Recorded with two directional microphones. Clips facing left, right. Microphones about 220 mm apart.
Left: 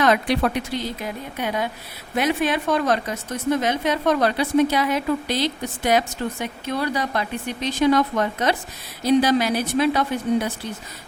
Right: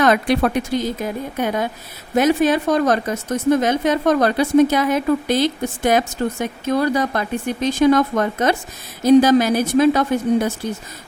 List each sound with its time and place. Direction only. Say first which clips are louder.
0.0 s a woman's voice: right 3 dB; 50° right (ahead or behind)